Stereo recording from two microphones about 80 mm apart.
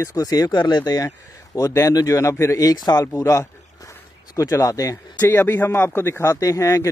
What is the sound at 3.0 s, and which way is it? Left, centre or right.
A man's voice, left.